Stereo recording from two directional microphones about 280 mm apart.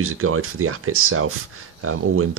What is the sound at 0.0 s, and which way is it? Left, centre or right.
Speech, right.